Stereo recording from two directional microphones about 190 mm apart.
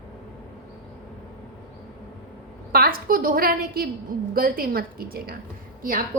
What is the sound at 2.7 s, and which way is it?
A woman's voice, 50° right (ahead or behind).